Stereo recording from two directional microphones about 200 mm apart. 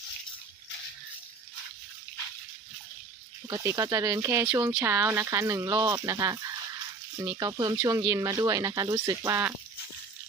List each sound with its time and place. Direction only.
3.4 s speech: 15° right (ahead or behind)